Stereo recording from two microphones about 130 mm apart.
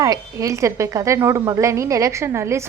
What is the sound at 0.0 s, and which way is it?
A woman's voice, 25° right (ahead or behind).